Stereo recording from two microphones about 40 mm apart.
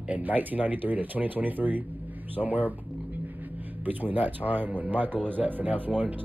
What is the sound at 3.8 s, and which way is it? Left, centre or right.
Speech, right.